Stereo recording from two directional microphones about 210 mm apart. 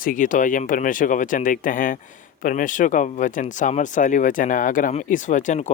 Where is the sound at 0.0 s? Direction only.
40° left (ahead or behind).